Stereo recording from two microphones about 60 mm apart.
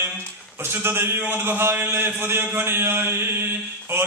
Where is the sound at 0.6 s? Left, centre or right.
Right.